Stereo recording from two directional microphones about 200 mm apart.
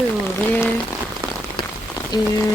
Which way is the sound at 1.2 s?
15° right (ahead or behind).